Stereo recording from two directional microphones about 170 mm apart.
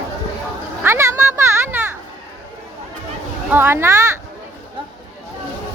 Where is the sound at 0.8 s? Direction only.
15° right (ahead or behind).